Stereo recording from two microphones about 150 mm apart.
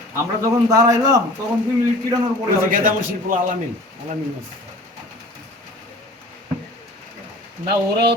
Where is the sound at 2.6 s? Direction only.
65° right (ahead or behind).